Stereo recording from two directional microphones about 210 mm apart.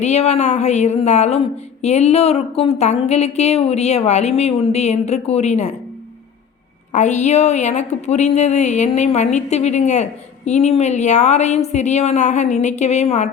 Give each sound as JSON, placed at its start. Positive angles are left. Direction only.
{"t": 0.0, "sound": "a woman's voice", "side_deg": 30}
{"t": 6.9, "sound": "a woman's voice", "side_deg": 35}